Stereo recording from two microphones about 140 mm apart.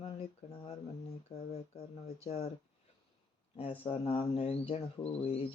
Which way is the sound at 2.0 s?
50° left (ahead or behind).